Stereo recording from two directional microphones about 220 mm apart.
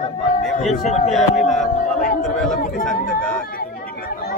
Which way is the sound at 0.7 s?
35° left (ahead or behind).